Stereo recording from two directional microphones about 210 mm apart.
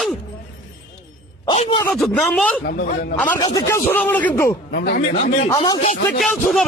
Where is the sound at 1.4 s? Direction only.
25° left (ahead or behind).